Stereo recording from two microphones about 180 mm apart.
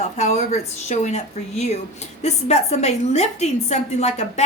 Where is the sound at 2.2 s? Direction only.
40° left (ahead or behind).